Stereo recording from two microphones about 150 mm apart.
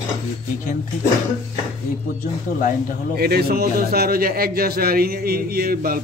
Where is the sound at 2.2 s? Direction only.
60° left (ahead or behind).